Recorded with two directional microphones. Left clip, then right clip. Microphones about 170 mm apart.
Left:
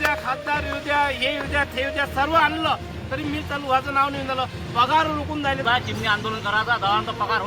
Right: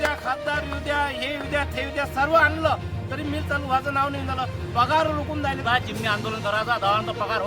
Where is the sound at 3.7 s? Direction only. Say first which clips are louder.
Left 4 dB; 30° right (ahead or behind).